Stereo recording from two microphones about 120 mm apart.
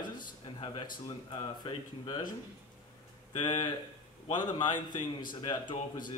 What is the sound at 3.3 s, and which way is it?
A man's voice, 35° left (ahead or behind).